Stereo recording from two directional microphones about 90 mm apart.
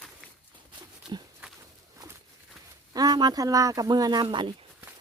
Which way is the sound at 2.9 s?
50° right (ahead or behind).